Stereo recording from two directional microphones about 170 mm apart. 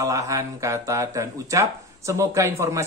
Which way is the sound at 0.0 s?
20° right (ahead or behind).